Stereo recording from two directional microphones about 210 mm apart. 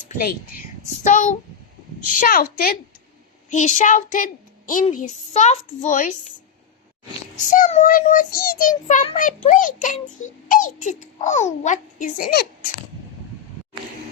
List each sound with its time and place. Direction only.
1.0 s a woman's voice: 35° left (ahead or behind)
3.5 s speech: 35° left (ahead or behind)
7.5 s speech: 40° left (ahead or behind)